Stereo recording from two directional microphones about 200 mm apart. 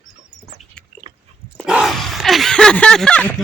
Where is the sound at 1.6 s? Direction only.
5° right (ahead or behind).